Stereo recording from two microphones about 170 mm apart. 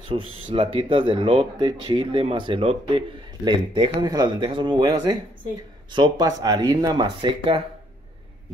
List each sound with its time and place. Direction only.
0.1 s speech: 30° right (ahead or behind)